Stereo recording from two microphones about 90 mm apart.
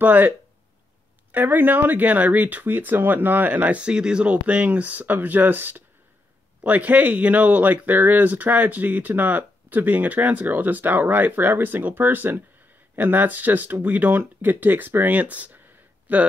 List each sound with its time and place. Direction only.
0.0 s speech: 20° right (ahead or behind)
1.3 s speech: 20° right (ahead or behind)